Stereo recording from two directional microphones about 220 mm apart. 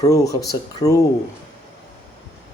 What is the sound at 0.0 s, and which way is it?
Speech, 15° left (ahead or behind).